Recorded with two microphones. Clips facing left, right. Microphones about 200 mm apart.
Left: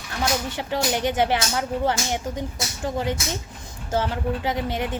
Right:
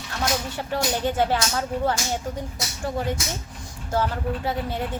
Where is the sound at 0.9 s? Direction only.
20° left (ahead or behind).